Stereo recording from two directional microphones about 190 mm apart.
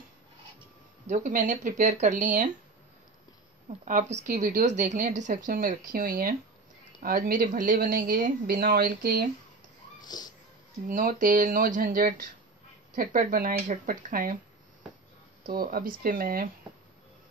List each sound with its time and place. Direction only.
1.0 s a woman's voice: 45° right (ahead or behind)
3.8 s a woman's voice: 45° right (ahead or behind)
9.9 s music: 20° left (ahead or behind)
10.9 s a woman's voice: 45° right (ahead or behind)
15.4 s a woman's voice: 50° right (ahead or behind)